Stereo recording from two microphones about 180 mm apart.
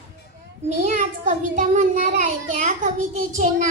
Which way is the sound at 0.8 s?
40° right (ahead or behind).